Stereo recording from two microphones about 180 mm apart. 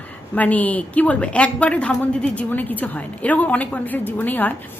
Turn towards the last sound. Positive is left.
turn(degrees=10)  # may be behind; listen again after turning